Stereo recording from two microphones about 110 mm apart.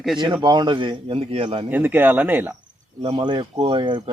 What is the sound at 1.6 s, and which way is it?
Speech, 15° right (ahead or behind).